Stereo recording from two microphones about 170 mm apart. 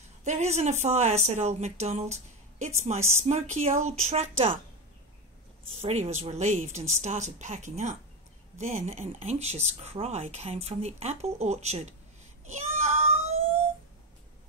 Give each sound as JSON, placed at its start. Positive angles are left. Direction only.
{"t": 0.2, "sound": "speech", "side_deg": -40}
{"t": 3.0, "sound": "a woman's voice", "side_deg": -15}
{"t": 3.3, "sound": "speech", "side_deg": -40}
{"t": 5.8, "sound": "a woman's voice", "side_deg": -40}
{"t": 12.5, "sound": "child singing", "side_deg": -35}